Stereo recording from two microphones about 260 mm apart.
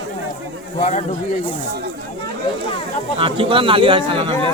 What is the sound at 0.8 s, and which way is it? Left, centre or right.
Speech, left.